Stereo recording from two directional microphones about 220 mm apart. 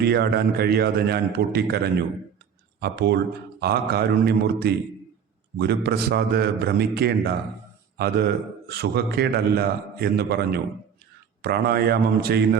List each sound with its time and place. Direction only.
0.0 s a man's voice: 45° right (ahead or behind)
11.4 s a man's voice: 45° right (ahead or behind)